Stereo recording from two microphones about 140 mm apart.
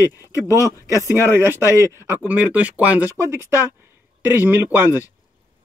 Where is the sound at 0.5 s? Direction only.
25° right (ahead or behind).